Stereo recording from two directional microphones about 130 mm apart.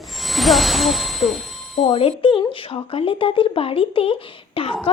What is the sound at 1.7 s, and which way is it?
Speech, 50° left (ahead or behind).